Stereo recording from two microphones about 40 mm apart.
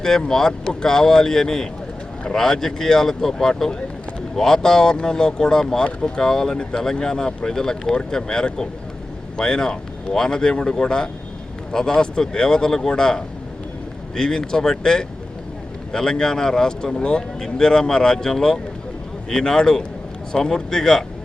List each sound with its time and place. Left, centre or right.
0.3 s speech: centre